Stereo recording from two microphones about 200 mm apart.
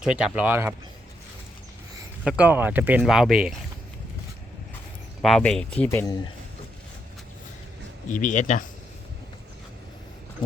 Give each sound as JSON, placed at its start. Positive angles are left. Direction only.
{"t": 0.0, "sound": "speech", "side_deg": -5}
{"t": 2.2, "sound": "speech", "side_deg": -5}
{"t": 5.2, "sound": "speech", "side_deg": 5}
{"t": 8.1, "sound": "speech", "side_deg": 40}